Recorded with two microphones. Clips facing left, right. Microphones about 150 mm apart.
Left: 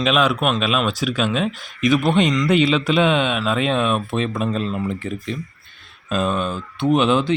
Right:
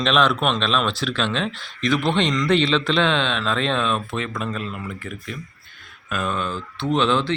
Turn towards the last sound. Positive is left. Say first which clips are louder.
# left 3 dB
turn(degrees=15)  # may be behind; listen again after turning